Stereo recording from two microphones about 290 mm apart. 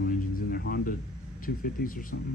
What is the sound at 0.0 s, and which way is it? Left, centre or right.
Music, left.